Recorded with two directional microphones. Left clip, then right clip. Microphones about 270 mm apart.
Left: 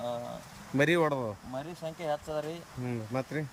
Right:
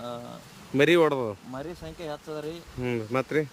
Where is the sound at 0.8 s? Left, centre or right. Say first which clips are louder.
Right 6 dB; centre.